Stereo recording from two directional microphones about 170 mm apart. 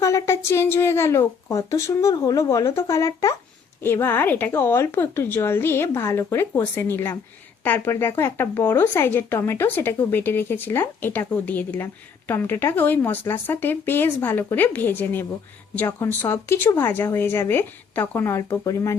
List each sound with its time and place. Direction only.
0.0 s a woman's voice: 15° left (ahead or behind)